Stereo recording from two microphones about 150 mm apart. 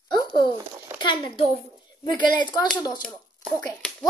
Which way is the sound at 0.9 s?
30° left (ahead or behind).